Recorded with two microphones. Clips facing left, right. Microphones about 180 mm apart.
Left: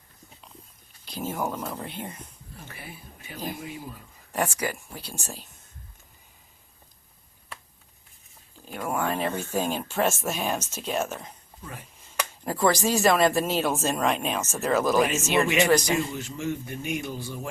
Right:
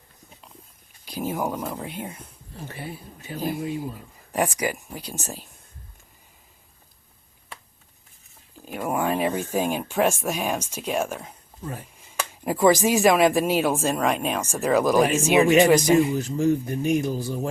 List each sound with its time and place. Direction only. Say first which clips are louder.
1.0 s speech: right 3 dB; 10° right (ahead or behind)
2.6 s speech: right 8 dB; 30° right (ahead or behind)
4.3 s speech: right 3 dB; 15° right (ahead or behind)
8.6 s speech: right 3 dB; 10° right (ahead or behind)
12.5 s speech: right 5 dB; 15° right (ahead or behind)
16.1 s speech: right 9 dB; 35° right (ahead or behind)